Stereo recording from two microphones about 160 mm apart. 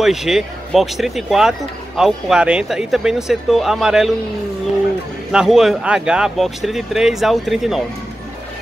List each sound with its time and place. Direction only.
0.0 s speech: centre (ahead or behind)
5.3 s speech: 5° right (ahead or behind)